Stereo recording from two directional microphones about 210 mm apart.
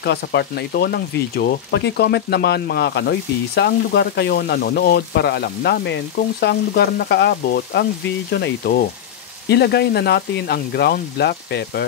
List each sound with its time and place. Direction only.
0.0 s speech: 50° left (ahead or behind)